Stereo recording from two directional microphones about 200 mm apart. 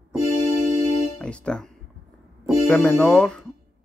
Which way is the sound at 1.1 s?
5° left (ahead or behind).